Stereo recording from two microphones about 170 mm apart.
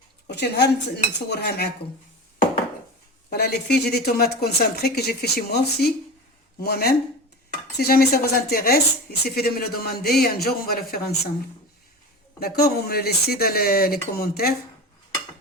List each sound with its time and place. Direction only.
0.3 s dishes: 80° left
1.3 s speech: 70° left (ahead or behind)
3.2 s speech: 70° left (ahead or behind)
12.4 s speech: 65° left (ahead or behind)